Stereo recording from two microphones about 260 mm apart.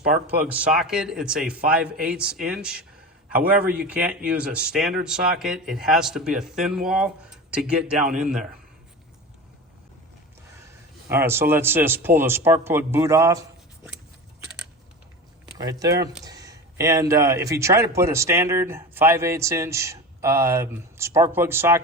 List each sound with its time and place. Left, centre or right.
0.0 s speech: right
0.4 s speech: centre
3.8 s speech: centre
11.3 s a man's voice: centre
15.5 s a man's voice: centre